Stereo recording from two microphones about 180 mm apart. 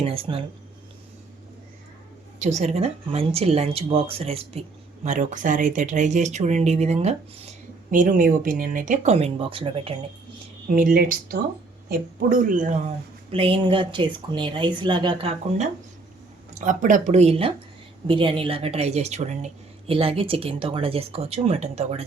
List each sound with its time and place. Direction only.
0.0 s speech: 30° right (ahead or behind)
2.4 s speech: 40° right (ahead or behind)
5.0 s speech: 45° right (ahead or behind)
7.9 s speech: 45° right (ahead or behind); by 9.9 s 30° right (ahead or behind)
10.7 s speech: 50° right (ahead or behind)
11.9 s speech: 45° right (ahead or behind)
13.3 s speech: 30° right (ahead or behind)